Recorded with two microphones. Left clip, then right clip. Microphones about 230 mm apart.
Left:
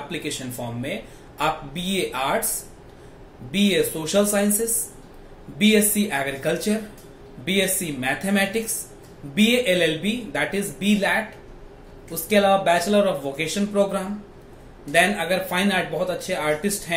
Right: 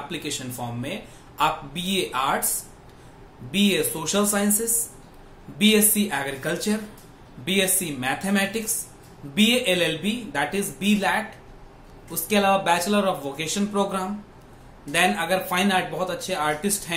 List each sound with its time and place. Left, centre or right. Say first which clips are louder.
0.1 s speech: left 2 dB; centre
1.4 s speech: right 1 dB; centre
3.5 s speech: left 2 dB; centre
5.6 s speech: left 1 dB; centre